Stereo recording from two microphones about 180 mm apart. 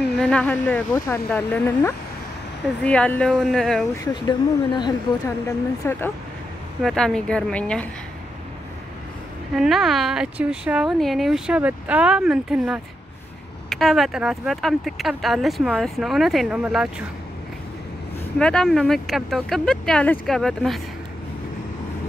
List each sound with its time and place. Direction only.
0.2 s speech: 5° left (ahead or behind)
0.9 s speech: 15° left (ahead or behind)
3.9 s speech: 20° left (ahead or behind)
5.9 s speech: 10° left (ahead or behind)
6.8 s speech: centre (ahead or behind)
9.6 s speech: centre (ahead or behind)
18.4 s speech: 5° left (ahead or behind)